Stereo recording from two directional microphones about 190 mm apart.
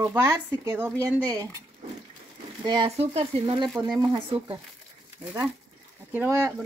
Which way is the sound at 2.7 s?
30° right (ahead or behind).